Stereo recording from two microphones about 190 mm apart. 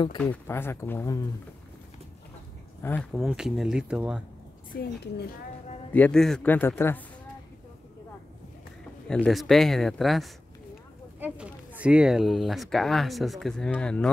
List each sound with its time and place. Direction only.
0.2 s speech: 10° left (ahead or behind)
2.8 s speech: 10° left (ahead or behind)
3.1 s speech: centre (ahead or behind)
4.7 s a woman's voice: 60° left (ahead or behind)
5.9 s speech: 10° left (ahead or behind)
9.1 s speech: centre (ahead or behind)